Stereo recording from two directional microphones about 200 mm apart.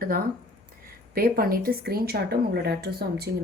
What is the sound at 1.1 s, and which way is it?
Speech, 50° right (ahead or behind).